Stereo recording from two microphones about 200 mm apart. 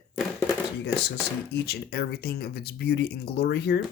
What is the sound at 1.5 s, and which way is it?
Speech, 50° left (ahead or behind).